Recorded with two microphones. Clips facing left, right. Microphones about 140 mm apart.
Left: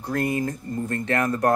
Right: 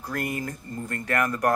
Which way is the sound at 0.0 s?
30° left (ahead or behind).